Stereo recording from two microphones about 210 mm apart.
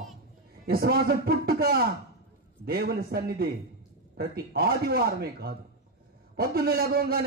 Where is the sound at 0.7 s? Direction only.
45° right (ahead or behind).